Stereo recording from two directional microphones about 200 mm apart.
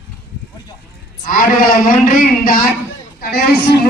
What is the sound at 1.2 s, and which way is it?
A man's voice, 45° left (ahead or behind).